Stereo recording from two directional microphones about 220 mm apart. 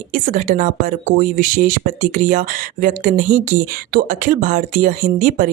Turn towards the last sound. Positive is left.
turn(degrees=-40)  # may be behind; listen again after turning